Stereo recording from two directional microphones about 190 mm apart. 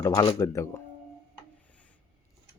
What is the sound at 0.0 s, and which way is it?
Speech, 20° left (ahead or behind).